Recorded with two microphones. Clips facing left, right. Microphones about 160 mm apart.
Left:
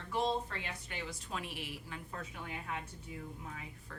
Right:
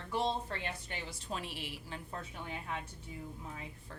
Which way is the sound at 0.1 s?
30° right (ahead or behind).